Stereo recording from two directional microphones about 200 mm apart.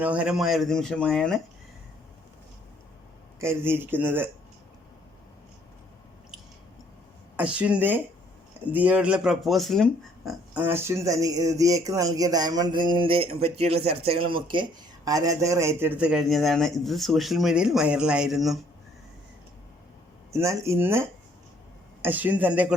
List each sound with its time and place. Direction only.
0.0 s a man's voice: 5° right (ahead or behind)
3.4 s speech: 10° right (ahead or behind)
7.3 s a man's voice: 5° right (ahead or behind)
20.3 s speech: 15° right (ahead or behind)